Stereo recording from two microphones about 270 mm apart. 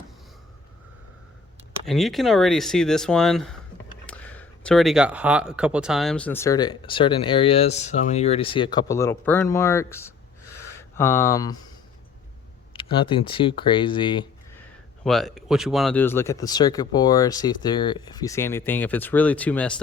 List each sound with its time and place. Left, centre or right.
1.9 s speech: centre
12.7 s speech: centre
14.6 s speech: centre